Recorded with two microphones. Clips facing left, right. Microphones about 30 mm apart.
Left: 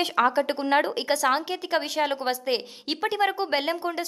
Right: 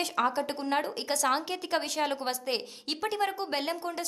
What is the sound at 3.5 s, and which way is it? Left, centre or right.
Speech, centre.